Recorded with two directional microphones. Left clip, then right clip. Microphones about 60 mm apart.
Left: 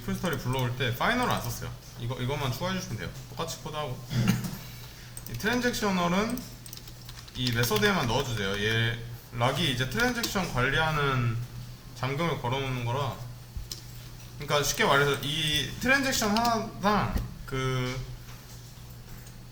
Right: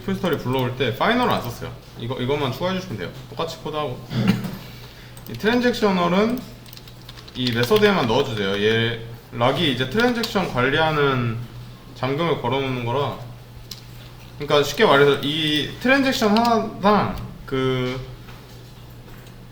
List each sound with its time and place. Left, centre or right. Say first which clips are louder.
0.0 s speech: right 9 dB; left
5.4 s speech: right 9 dB; left
7.3 s speech: right 9 dB; left
14.4 s speech: right 9 dB; left